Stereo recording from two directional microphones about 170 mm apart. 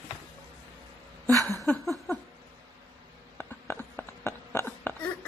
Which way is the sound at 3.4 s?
10° left (ahead or behind).